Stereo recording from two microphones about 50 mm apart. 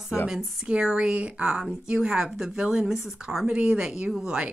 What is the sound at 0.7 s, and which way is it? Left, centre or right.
Speech, centre.